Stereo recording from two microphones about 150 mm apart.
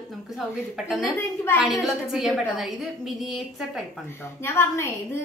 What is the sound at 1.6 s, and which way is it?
Speech, centre (ahead or behind).